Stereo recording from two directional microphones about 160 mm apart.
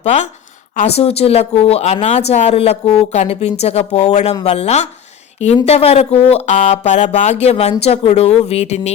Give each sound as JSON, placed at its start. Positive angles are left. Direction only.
{"t": 0.0, "sound": "a woman's voice", "side_deg": 45}